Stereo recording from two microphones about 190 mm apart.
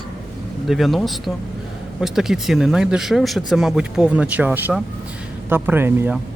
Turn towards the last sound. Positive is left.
turn(degrees=-10)  # may be behind; listen again after turning